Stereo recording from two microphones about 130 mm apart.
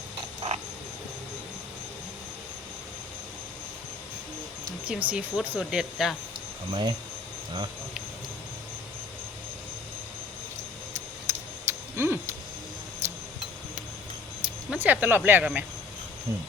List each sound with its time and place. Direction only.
4.9 s speech: 10° right (ahead or behind)
6.7 s speech: 35° right (ahead or behind)
10.9 s a sound: 20° right (ahead or behind)
14.4 s speech: 10° right (ahead or behind)